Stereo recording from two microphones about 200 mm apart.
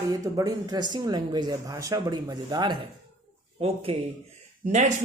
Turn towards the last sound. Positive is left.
turn(degrees=-35)  # may be behind; listen again after turning